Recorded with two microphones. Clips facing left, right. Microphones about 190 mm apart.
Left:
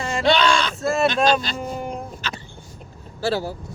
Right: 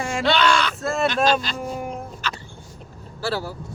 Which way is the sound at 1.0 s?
20° left (ahead or behind).